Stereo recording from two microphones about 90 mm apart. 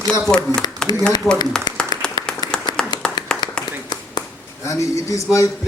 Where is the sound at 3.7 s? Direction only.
50° left (ahead or behind).